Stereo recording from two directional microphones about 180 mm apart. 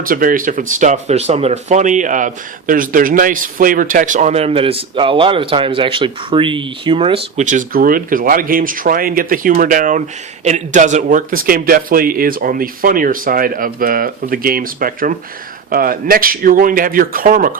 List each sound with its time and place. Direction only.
0.0 s speech: 50° right (ahead or behind); by 7.4 s 30° right (ahead or behind)
7.4 s speech: 50° right (ahead or behind)